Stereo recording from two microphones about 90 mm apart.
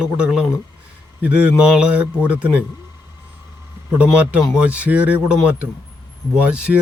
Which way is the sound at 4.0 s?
15° right (ahead or behind).